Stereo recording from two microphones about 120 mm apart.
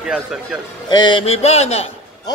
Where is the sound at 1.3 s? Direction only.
60° left (ahead or behind).